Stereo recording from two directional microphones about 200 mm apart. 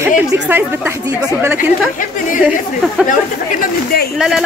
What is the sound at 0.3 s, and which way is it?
Speech, 10° right (ahead or behind).